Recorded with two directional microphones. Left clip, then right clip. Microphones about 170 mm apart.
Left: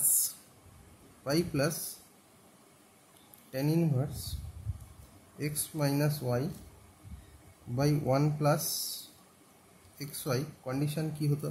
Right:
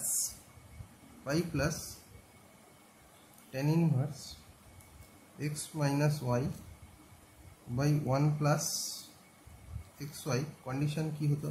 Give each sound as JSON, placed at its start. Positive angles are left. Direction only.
{"t": 1.2, "sound": "speech", "side_deg": 30}
{"t": 3.5, "sound": "speech", "side_deg": 25}
{"t": 5.4, "sound": "speech", "side_deg": 30}
{"t": 7.7, "sound": "speech", "side_deg": 30}
{"t": 9.9, "sound": "speech", "side_deg": 30}